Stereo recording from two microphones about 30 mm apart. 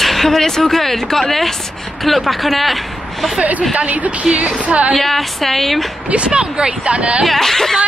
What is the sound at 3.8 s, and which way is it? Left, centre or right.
Speech, right.